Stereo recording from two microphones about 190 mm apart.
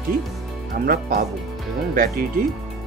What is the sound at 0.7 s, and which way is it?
Speech, 50° right (ahead or behind).